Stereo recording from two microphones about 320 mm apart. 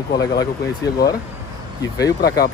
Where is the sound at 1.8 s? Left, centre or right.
Centre.